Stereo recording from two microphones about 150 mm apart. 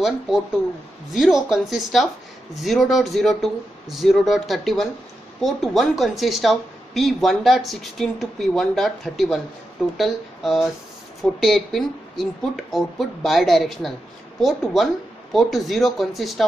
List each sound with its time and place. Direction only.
1.1 s speech: centre (ahead or behind)